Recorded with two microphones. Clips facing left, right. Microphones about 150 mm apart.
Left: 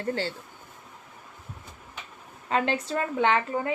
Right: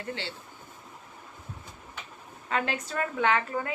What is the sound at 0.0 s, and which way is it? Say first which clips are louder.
Speech: left 7 dB; 40° left (ahead or behind).